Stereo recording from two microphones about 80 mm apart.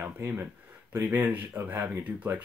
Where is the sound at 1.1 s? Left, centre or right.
Centre.